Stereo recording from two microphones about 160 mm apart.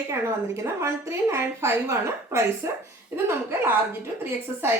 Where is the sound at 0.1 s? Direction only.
15° right (ahead or behind).